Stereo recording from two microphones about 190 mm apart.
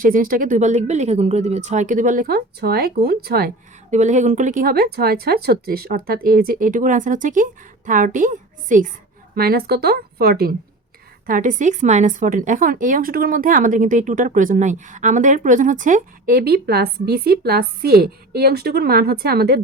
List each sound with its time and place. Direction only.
0.0 s speech: 45° right (ahead or behind)
3.9 s a woman's voice: 40° right (ahead or behind); by 19.5 s 55° right (ahead or behind)